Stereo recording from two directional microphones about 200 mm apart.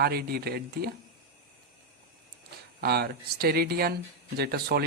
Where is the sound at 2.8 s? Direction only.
50° right (ahead or behind).